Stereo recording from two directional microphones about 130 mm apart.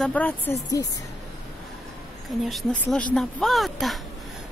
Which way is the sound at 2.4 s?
Centre (ahead or behind).